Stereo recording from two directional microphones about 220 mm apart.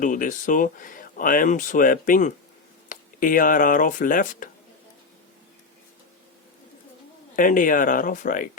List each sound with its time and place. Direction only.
0.0 s speech: 35° left (ahead or behind)
7.3 s speech: 35° left (ahead or behind)